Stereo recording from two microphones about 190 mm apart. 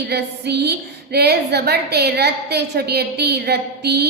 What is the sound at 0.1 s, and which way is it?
A woman's voice, 60° right (ahead or behind).